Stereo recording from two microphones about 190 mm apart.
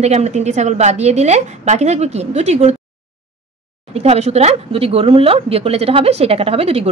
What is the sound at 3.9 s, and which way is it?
Speech, 35° right (ahead or behind).